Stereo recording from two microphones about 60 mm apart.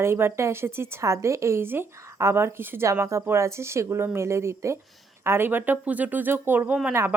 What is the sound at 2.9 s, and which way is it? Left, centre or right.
Speech, right.